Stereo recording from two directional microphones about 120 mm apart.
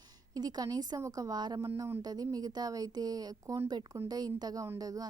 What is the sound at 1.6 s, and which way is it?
A woman's voice, 25° right (ahead or behind).